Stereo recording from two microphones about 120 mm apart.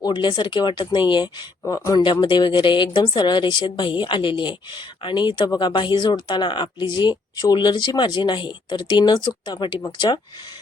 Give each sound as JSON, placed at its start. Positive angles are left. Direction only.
{"t": 0.0, "sound": "a woman's voice", "side_deg": 40}
{"t": 1.6, "sound": "a woman's voice", "side_deg": 30}